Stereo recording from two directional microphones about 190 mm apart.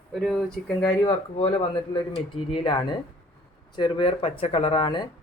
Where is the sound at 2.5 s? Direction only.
25° left (ahead or behind).